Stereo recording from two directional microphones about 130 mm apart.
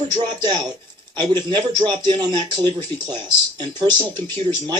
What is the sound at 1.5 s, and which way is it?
Speech, 35° right (ahead or behind).